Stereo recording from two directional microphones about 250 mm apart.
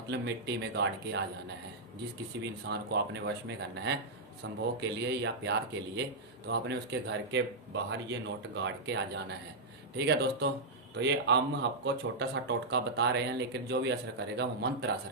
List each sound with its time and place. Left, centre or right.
0.1 s speech: right
2.3 s speech: right
8.6 s speech: right